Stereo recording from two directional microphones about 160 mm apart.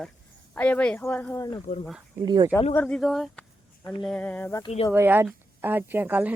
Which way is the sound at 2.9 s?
Centre (ahead or behind).